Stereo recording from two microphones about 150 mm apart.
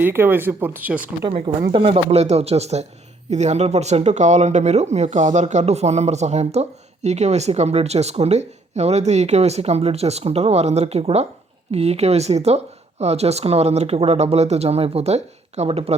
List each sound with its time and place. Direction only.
0.0 s speech: 15° right (ahead or behind)
1.7 s speech: 40° right (ahead or behind)